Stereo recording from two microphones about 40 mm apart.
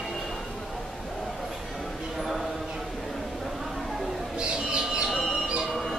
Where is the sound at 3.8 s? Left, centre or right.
Centre.